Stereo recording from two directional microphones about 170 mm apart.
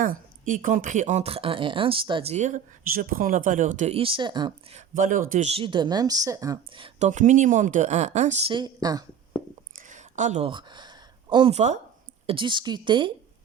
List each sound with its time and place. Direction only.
0.0 s speech: 50° right (ahead or behind); by 4.5 s 25° right (ahead or behind)
4.7 s speech: 50° right (ahead or behind); by 6.8 s 20° right (ahead or behind)
6.8 s speech: 45° right (ahead or behind); by 9.0 s 20° right (ahead or behind)
9.7 s a sound: 45° right (ahead or behind)
10.5 s speech: 25° right (ahead or behind)